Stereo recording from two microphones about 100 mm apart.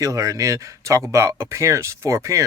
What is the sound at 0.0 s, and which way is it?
Speech, 35° right (ahead or behind).